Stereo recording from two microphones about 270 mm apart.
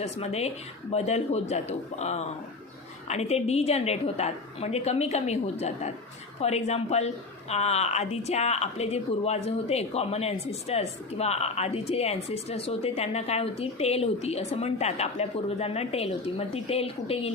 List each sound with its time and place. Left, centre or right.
0.0 s speech: left